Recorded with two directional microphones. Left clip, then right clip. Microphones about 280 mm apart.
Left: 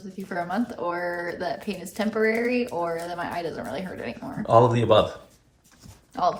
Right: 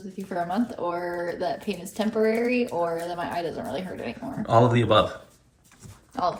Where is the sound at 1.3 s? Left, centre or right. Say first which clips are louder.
Right 1 dB; left.